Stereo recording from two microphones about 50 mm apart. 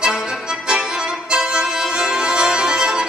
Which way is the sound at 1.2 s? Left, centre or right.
Centre.